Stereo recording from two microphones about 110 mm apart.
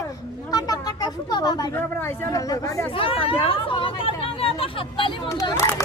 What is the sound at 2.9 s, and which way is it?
Speech, 55° left (ahead or behind).